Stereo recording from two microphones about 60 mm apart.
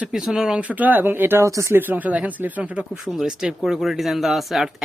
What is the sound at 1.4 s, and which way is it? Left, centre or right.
Speech, right.